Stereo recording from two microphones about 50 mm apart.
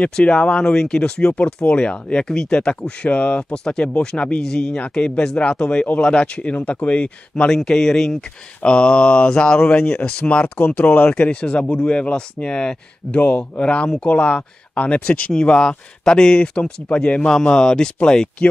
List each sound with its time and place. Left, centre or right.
0.2 s speech: centre
3.1 s speech: left
3.4 s speech: centre
7.4 s speech: centre
8.6 s speech: left
10.6 s speech: left
11.1 s speech: left